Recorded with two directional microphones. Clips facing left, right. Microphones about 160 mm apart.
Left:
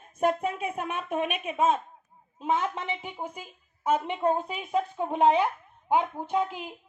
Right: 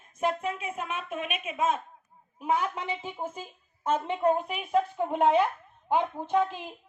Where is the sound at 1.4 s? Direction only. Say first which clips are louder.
Left 1 dB; 30° left (ahead or behind); by 6.7 s 10° left (ahead or behind).